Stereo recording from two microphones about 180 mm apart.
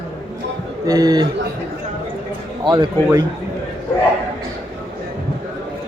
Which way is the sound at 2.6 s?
25° right (ahead or behind).